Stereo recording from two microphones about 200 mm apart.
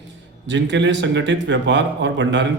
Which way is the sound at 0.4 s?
65° right (ahead or behind).